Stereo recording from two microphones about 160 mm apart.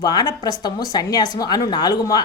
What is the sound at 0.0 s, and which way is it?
Speech, 25° left (ahead or behind).